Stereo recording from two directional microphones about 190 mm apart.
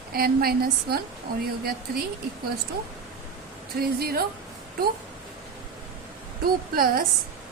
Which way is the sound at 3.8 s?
55° right (ahead or behind).